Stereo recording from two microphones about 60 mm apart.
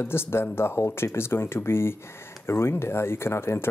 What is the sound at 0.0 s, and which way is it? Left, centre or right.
Speech, left.